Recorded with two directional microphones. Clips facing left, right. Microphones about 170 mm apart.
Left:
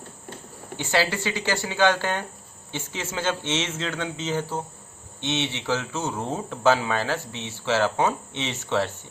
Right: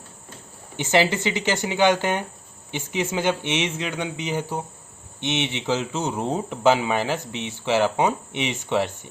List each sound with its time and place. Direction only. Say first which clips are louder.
0.8 s speech: right 4 dB; 20° right (ahead or behind)